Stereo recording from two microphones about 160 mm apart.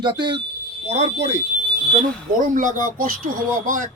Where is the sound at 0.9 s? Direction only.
40° right (ahead or behind).